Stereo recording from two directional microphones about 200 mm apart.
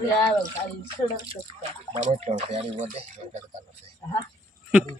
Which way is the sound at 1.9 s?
35° right (ahead or behind).